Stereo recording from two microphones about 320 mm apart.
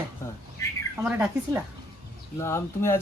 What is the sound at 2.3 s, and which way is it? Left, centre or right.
Speech, centre.